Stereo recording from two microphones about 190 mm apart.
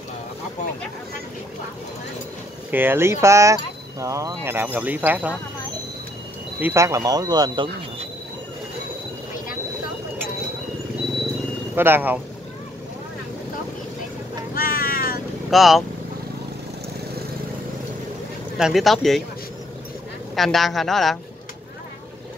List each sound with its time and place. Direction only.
2.7 s speech: 10° right (ahead or behind)
6.6 s speech: 15° right (ahead or behind)
11.7 s speech: 10° right (ahead or behind)
14.5 s vehicle: 55° left (ahead or behind)
15.5 s a woman's voice: centre (ahead or behind)
18.6 s a woman's voice: centre (ahead or behind)
20.3 s a woman's voice: centre (ahead or behind)